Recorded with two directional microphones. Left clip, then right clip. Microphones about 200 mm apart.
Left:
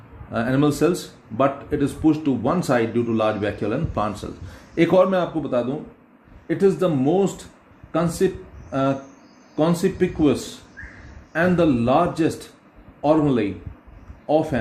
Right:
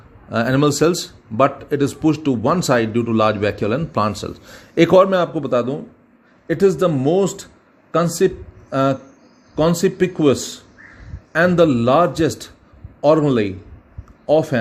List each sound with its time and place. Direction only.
0.3 s speech: 50° right (ahead or behind)